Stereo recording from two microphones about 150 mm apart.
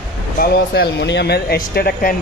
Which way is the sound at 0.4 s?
90° left.